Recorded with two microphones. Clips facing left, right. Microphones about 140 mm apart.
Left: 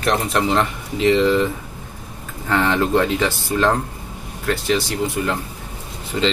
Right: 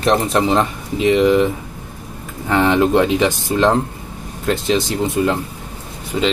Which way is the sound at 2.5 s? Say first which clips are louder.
Right 4 dB; 15° right (ahead or behind).